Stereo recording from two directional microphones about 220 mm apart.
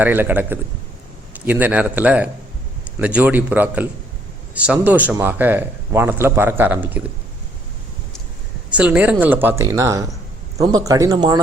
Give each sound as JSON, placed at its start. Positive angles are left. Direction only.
{"t": 0.0, "sound": "speech", "side_deg": -10}
{"t": 8.7, "sound": "speech", "side_deg": -5}